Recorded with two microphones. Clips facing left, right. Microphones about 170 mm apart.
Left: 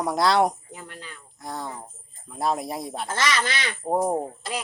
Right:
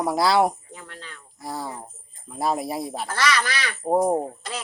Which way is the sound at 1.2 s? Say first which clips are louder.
Right 2 dB; centre (ahead or behind).